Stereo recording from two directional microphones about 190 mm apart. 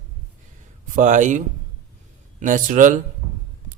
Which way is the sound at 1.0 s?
40° right (ahead or behind).